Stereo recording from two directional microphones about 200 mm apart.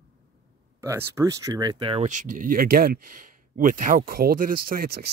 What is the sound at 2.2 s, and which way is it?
Speech, 40° right (ahead or behind).